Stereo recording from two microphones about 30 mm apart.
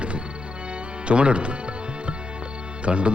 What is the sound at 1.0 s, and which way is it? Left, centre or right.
Speech, right.